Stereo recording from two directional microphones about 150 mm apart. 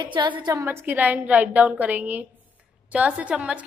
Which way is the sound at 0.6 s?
15° right (ahead or behind).